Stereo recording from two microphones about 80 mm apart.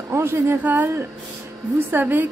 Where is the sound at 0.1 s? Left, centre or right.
Right.